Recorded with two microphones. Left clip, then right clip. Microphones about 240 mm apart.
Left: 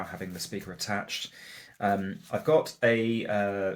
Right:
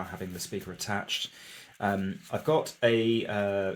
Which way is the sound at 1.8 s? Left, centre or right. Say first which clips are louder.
Left 2 dB; right.